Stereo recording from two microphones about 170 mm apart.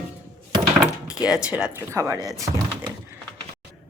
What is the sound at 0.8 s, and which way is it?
Speech, 5° right (ahead or behind).